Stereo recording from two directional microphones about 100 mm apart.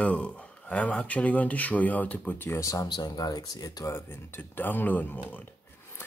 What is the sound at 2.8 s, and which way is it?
Speech, 45° left (ahead or behind).